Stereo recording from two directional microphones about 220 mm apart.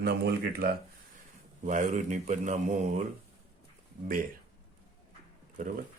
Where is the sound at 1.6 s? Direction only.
35° right (ahead or behind).